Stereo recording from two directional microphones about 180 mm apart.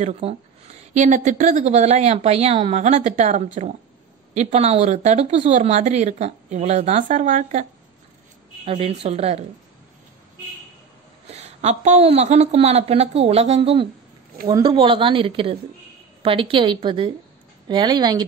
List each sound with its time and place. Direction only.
0.0 s speech: 35° right (ahead or behind)
8.6 s speech: 35° right (ahead or behind)
11.2 s speech: 35° right (ahead or behind)